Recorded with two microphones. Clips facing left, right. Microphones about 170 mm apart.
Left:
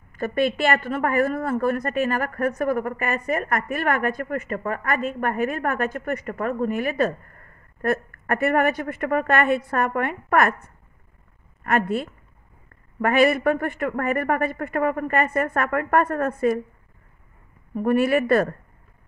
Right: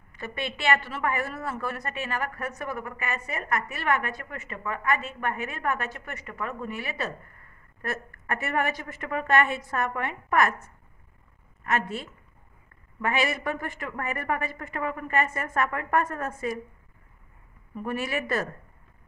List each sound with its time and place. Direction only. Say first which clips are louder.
0.1 s a woman's voice: left 12 dB; 50° left (ahead or behind)
17.7 s speech: left 11 dB; 55° left (ahead or behind)